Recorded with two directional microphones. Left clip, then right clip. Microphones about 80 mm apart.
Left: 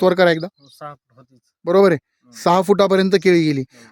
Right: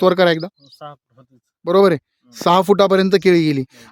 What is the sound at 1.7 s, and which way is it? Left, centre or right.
Speech, centre.